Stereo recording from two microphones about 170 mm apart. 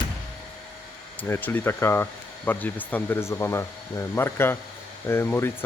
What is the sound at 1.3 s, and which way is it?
Speech, 10° left (ahead or behind).